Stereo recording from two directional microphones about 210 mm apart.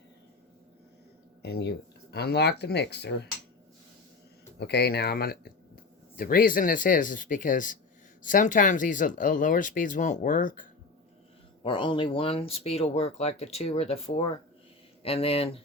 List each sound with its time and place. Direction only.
1.4 s speech: 50° left (ahead or behind)
4.6 s speech: 50° left (ahead or behind)
11.6 s speech: 25° left (ahead or behind)